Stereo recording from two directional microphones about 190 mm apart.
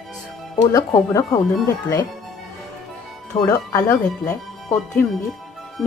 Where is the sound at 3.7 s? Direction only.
15° left (ahead or behind).